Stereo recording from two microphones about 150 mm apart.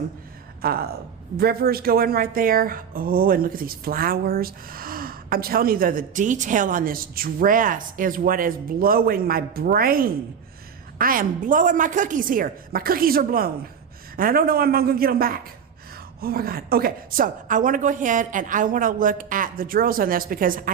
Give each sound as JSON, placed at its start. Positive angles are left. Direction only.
{"t": 0.6, "sound": "a man's voice", "side_deg": -90}
{"t": 16.2, "sound": "a woman's voice", "side_deg": -90}